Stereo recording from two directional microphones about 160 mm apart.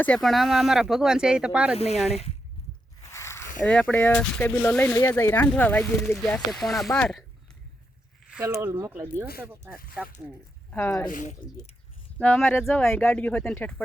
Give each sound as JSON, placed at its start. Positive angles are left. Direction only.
{"t": 0.0, "sound": "speech", "side_deg": 5}
{"t": 2.0, "sound": "speech", "side_deg": 40}
{"t": 3.1, "sound": "zipper", "side_deg": 15}
{"t": 3.7, "sound": "speech", "side_deg": 5}
{"t": 8.3, "sound": "speech", "side_deg": -15}
{"t": 10.7, "sound": "speech", "side_deg": 15}
{"t": 11.1, "sound": "speech", "side_deg": 55}
{"t": 12.1, "sound": "speech", "side_deg": 10}